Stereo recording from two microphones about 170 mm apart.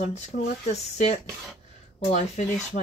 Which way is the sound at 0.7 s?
40° left (ahead or behind).